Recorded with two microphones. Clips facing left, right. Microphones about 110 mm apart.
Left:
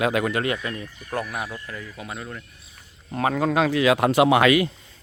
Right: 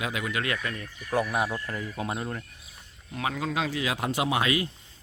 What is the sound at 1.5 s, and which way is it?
Speech, 35° right (ahead or behind).